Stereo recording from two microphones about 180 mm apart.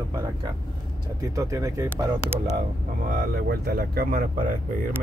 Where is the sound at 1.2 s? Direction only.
15° right (ahead or behind).